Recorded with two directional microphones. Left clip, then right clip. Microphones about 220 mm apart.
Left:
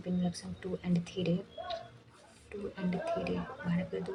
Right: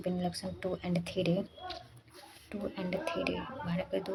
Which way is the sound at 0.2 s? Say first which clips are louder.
Right 4 dB; 20° right (ahead or behind).